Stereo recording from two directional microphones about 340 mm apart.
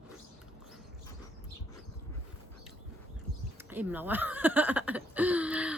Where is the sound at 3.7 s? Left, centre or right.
Centre.